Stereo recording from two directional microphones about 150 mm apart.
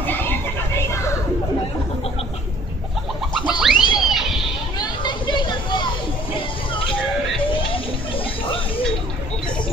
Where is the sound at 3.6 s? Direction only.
5° right (ahead or behind).